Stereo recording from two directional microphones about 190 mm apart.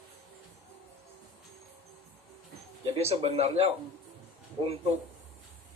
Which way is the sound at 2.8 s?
30° right (ahead or behind).